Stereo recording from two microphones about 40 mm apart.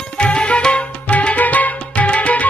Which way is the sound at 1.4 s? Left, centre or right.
Left.